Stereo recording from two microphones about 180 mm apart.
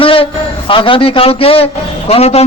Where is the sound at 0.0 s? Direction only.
30° left (ahead or behind).